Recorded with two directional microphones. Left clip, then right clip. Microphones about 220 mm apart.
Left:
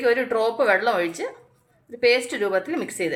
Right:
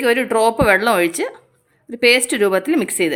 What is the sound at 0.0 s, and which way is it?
Speech, 45° right (ahead or behind).